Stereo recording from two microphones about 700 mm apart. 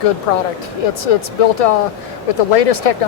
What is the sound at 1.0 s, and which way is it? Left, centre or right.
Speech, left.